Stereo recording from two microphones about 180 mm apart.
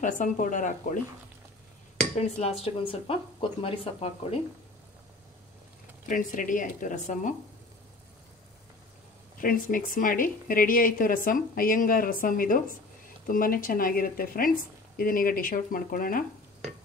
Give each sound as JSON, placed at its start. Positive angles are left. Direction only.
{"t": 0.0, "sound": "a woman's voice", "side_deg": 45}
{"t": 2.1, "sound": "speech", "side_deg": 35}
{"t": 6.0, "sound": "a woman's voice", "side_deg": 45}
{"t": 9.4, "sound": "a woman's voice", "side_deg": 50}